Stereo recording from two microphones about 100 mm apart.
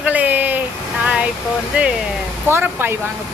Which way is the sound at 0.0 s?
15° right (ahead or behind).